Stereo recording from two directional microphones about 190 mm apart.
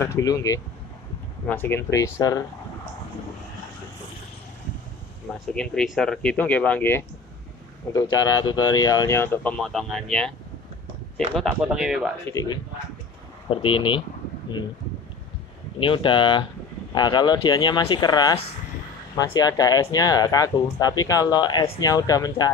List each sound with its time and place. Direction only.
0.0 s speech: 15° left (ahead or behind)
5.5 s speech: 5° left (ahead or behind)
12.3 s speech: 20° left (ahead or behind)
15.8 s speech: 25° left (ahead or behind)